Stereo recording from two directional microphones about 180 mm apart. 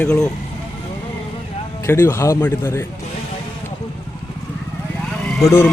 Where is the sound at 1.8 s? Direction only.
15° left (ahead or behind).